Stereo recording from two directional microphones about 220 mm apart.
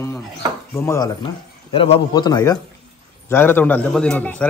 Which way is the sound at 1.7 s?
25° left (ahead or behind).